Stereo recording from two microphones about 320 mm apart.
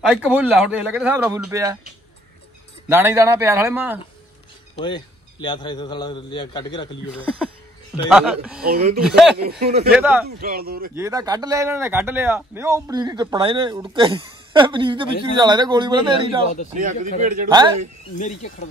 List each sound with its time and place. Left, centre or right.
0.1 s speech: centre
2.9 s speech: centre
4.7 s a man's voice: centre
8.1 s speech: centre
8.6 s speech: right
9.0 s speech: centre
9.4 s speech: right
9.8 s speech: centre
10.2 s speech: right
11.0 s speech: centre
16.7 s speech: right
18.1 s speech: left